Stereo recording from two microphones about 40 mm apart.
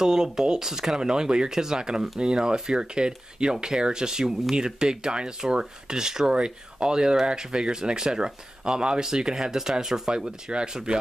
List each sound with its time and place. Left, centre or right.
0.0 s speech: centre